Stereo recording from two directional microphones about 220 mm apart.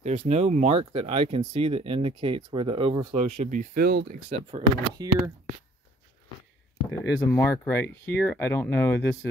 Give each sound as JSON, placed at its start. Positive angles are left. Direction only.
{"t": 0.0, "sound": "speech", "side_deg": -30}
{"t": 4.3, "sound": "speech", "side_deg": -25}
{"t": 7.0, "sound": "speech", "side_deg": 10}